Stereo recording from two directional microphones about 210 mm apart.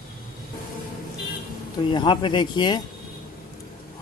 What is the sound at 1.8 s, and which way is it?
Speech, 20° left (ahead or behind).